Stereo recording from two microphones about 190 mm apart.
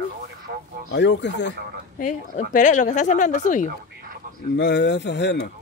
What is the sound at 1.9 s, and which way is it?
A woman's voice, 45° left (ahead or behind).